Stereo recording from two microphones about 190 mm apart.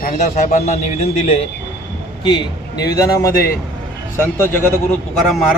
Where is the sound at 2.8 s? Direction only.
15° left (ahead or behind).